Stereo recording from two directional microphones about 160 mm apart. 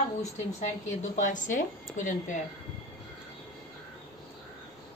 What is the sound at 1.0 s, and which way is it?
A woman's voice, 50° left (ahead or behind).